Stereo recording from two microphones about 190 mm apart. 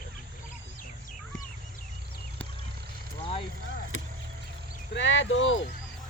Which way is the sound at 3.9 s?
90° left.